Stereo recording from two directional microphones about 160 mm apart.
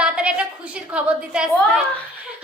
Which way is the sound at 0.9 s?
5° right (ahead or behind).